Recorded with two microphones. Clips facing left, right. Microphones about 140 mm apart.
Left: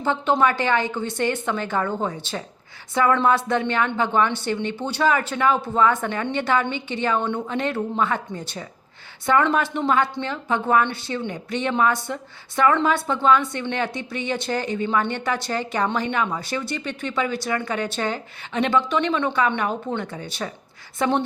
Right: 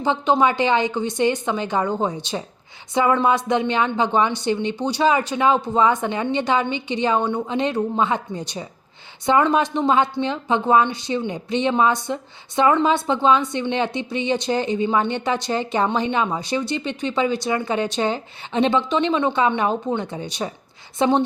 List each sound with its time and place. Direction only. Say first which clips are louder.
0.0 s speech: right 2 dB; 15° right (ahead or behind)